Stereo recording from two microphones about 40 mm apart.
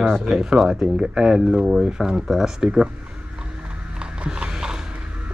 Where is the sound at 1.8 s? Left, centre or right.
Centre.